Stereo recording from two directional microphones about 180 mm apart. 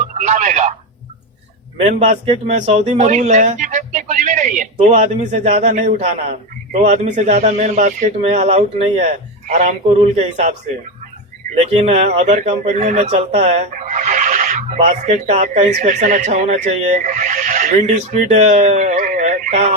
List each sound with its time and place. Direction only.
0.1 s telephone: 40° right (ahead or behind)
1.8 s speech: 35° right (ahead or behind)
11.5 s speech: 35° right (ahead or behind)